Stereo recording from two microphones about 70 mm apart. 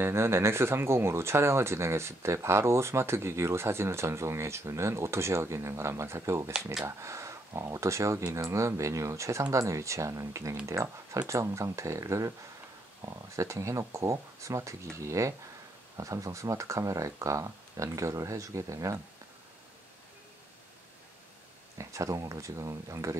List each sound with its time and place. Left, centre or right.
0.0 s speech: right
21.7 s speech: right